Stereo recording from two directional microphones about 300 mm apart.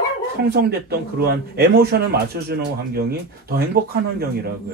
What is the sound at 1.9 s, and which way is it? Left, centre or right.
Speech, right.